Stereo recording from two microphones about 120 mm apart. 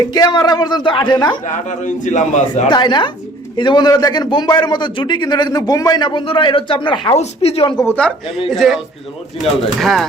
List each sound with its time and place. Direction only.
0.1 s a man's voice: 35° left (ahead or behind)
1.5 s a man's voice: 90° left
2.6 s a man's voice: 40° left (ahead or behind)
7.2 s speech: 60° left (ahead or behind)
8.4 s speech: centre (ahead or behind)